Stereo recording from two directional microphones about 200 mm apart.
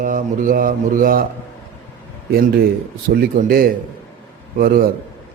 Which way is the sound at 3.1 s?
50° right (ahead or behind).